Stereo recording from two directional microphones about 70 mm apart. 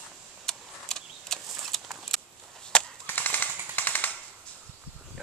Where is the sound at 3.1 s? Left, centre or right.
Left.